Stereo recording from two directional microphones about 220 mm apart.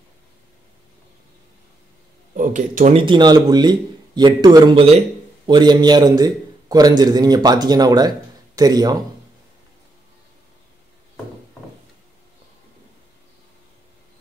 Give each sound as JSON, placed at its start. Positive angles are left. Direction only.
{"t": 2.3, "sound": "a man's voice", "side_deg": -35}